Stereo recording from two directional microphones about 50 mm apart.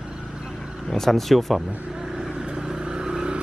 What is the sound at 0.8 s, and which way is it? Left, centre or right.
Speech, centre.